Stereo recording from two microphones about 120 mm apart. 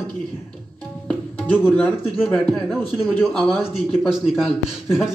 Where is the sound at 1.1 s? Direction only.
15° left (ahead or behind).